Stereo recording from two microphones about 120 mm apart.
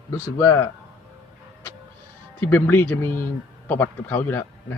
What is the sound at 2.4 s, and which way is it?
A man's voice, 20° left (ahead or behind).